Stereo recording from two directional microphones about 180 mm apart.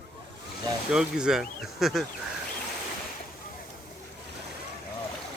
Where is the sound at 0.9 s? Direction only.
5° right (ahead or behind).